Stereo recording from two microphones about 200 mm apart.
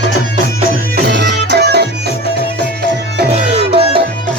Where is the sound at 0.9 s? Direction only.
60° right (ahead or behind).